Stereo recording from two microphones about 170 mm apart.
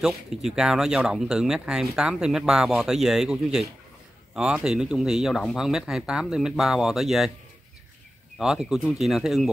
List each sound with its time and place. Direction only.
0.0 s speech: centre (ahead or behind)
8.4 s speech: 5° right (ahead or behind)